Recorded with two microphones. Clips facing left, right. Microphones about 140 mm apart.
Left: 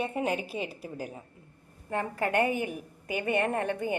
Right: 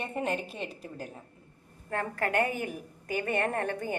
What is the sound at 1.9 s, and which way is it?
A woman's voice, 15° left (ahead or behind).